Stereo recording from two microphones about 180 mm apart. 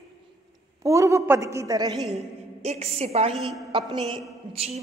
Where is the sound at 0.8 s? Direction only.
15° right (ahead or behind).